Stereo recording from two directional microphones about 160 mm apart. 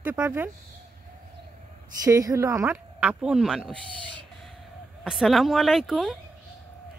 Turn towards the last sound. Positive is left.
turn(degrees=0)  # may be behind; listen again after turning